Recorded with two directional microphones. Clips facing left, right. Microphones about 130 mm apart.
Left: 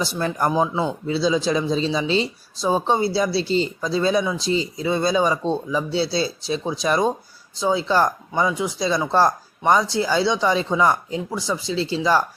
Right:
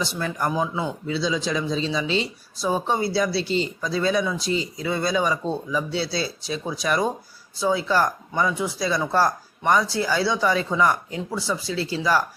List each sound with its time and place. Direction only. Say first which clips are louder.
0.0 s speech: left 4 dB; 40° left (ahead or behind)